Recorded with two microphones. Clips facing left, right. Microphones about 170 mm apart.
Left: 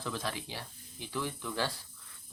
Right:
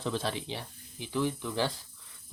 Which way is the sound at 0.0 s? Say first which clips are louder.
Right 5 dB; 25° right (ahead or behind).